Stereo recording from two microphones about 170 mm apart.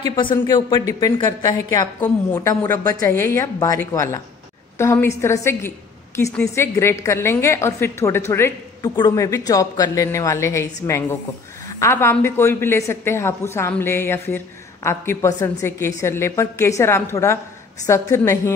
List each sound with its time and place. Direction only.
0.1 s a woman's voice: 30° left (ahead or behind)